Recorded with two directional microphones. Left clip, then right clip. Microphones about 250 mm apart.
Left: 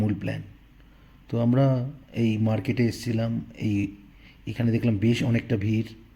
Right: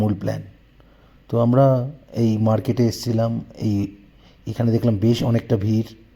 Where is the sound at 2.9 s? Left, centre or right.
Centre.